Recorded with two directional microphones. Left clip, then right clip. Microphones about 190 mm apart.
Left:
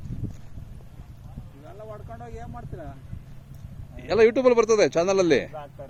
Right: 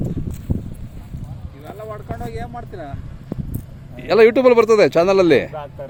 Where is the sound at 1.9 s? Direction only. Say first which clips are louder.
Right 11 dB; 45° left (ahead or behind).